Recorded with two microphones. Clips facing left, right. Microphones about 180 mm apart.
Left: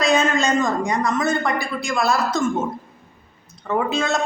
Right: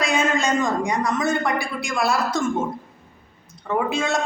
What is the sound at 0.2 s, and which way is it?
A man's voice, 10° right (ahead or behind).